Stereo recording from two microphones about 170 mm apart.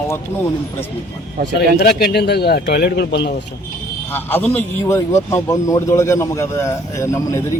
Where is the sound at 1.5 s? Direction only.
70° left (ahead or behind).